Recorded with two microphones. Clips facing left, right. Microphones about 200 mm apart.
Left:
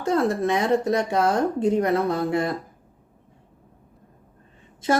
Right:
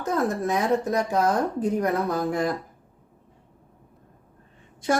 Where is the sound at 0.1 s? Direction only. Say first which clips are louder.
Left 3 dB; 30° left (ahead or behind).